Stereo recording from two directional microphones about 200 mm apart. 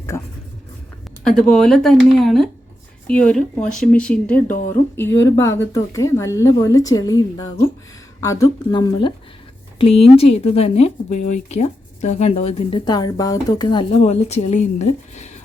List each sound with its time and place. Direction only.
0.1 s speech: 10° left (ahead or behind)
1.4 s speech: 5° left (ahead or behind); by 15.3 s 35° left (ahead or behind)